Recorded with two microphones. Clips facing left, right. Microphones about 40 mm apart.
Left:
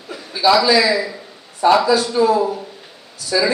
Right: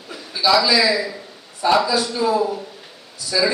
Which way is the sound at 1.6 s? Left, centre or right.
Left.